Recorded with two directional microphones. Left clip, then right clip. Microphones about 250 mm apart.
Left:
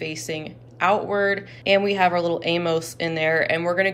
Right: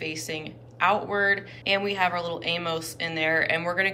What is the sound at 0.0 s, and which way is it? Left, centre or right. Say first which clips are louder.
A woman's voice: left 3 dB; centre.